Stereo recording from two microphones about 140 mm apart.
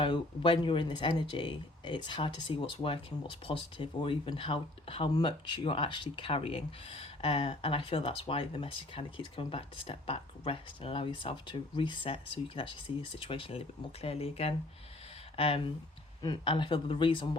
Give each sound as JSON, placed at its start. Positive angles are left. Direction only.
{"t": 0.0, "sound": "speech", "side_deg": 40}
{"t": 16.2, "sound": "speech", "side_deg": 30}